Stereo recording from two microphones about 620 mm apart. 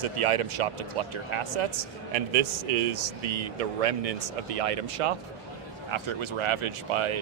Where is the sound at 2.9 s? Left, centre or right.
Right.